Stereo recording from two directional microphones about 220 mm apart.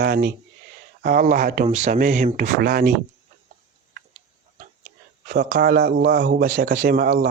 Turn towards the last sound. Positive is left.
turn(degrees=-45)  # may be behind; listen again after turning